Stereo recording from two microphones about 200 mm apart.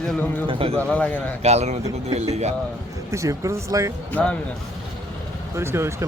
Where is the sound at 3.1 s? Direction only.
15° right (ahead or behind).